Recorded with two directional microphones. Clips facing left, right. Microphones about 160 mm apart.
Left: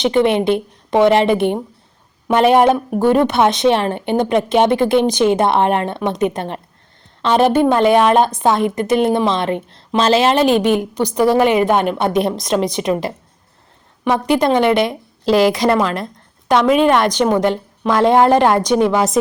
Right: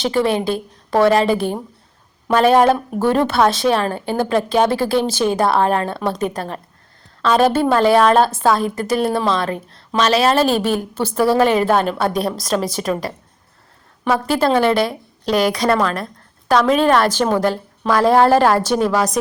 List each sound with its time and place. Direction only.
0.0 s a woman's voice: 20° left (ahead or behind)